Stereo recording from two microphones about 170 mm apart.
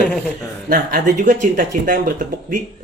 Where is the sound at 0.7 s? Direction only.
50° right (ahead or behind).